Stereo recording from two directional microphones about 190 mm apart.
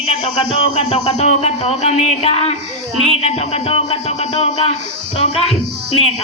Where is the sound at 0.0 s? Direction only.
30° left (ahead or behind).